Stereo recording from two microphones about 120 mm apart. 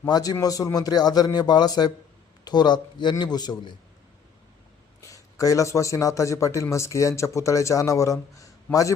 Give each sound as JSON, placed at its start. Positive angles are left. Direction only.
{"t": 0.0, "sound": "speech", "side_deg": 30}
{"t": 4.9, "sound": "a man's voice", "side_deg": 30}